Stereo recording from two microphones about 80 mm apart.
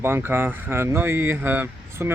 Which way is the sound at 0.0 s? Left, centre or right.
Right.